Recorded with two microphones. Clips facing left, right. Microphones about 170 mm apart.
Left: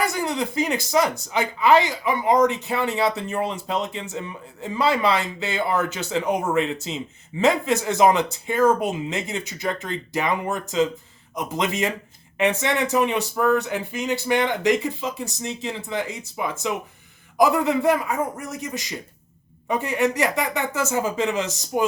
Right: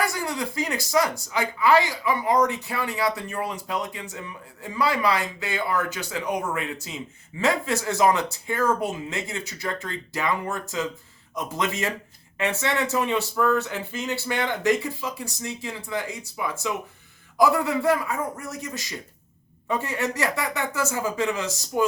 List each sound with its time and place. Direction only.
0.0 s speech: 20° left (ahead or behind)